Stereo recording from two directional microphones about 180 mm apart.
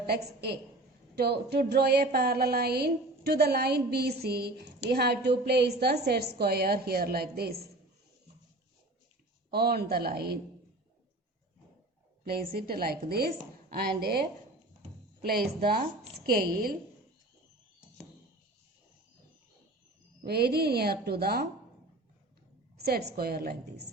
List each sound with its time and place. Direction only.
0.3 s a woman's voice: 60° right (ahead or behind)
9.5 s a woman's voice: 60° right (ahead or behind)
12.2 s a woman's voice: 55° right (ahead or behind)
20.2 s a woman's voice: 60° right (ahead or behind)
22.8 s a woman's voice: 60° right (ahead or behind)